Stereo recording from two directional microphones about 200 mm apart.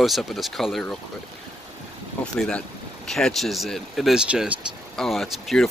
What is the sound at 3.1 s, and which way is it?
Speech, centre (ahead or behind).